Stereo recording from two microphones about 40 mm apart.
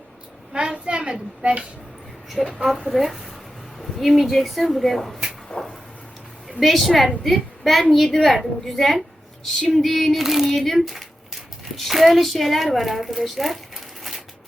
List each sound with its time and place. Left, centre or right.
0.5 s a child's voice: centre
2.6 s a woman's voice: centre
5.5 s a sound: left
6.6 s a woman's voice: centre
9.6 s female singing: centre
9.8 s a woman's voice: centre
10.2 s child singing: centre
10.5 s speech: centre